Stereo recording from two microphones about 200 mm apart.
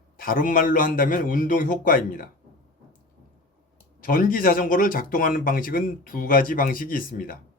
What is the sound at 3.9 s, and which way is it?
Speech, 45° left (ahead or behind).